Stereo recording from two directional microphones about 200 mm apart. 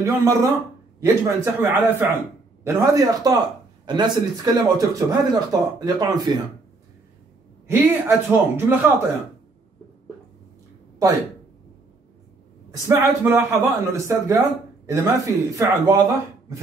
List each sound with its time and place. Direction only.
0.0 s speech: 15° right (ahead or behind)
7.6 s speech: 10° right (ahead or behind)
12.8 s speech: 15° right (ahead or behind)